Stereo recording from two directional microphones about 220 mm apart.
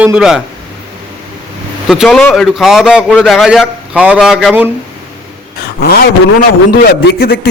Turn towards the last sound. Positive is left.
turn(degrees=45)  # may be behind; listen again after turning